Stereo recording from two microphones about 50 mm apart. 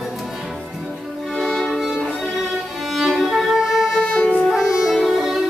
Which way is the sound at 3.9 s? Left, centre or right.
Centre.